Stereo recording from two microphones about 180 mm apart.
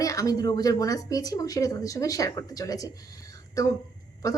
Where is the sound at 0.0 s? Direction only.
20° left (ahead or behind).